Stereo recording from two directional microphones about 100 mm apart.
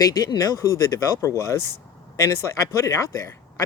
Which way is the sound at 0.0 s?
40° left (ahead or behind).